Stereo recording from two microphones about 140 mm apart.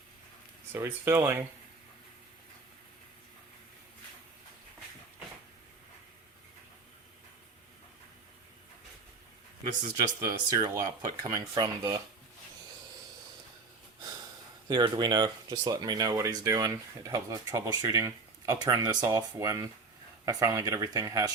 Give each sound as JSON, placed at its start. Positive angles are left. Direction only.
{"t": 0.7, "sound": "speech", "side_deg": -15}
{"t": 10.2, "sound": "speech", "side_deg": -25}
{"t": 14.0, "sound": "a sound", "side_deg": -30}
{"t": 14.7, "sound": "speech", "side_deg": -30}